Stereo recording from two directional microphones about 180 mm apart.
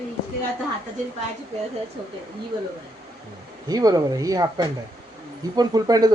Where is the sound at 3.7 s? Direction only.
20° right (ahead or behind).